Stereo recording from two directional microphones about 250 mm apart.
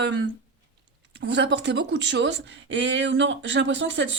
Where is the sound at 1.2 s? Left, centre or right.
Right.